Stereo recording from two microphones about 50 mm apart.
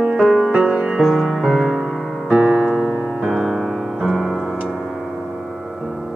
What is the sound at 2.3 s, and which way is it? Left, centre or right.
Piano, centre.